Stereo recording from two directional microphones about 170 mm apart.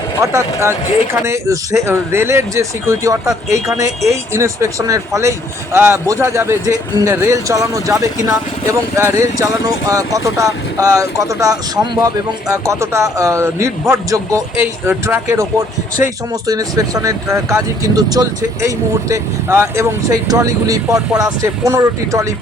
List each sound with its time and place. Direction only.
0.2 s speech: 15° right (ahead or behind)
16.3 s speech: 20° right (ahead or behind)